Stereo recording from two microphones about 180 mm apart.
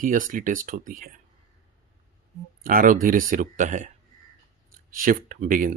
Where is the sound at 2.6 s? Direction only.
50° right (ahead or behind).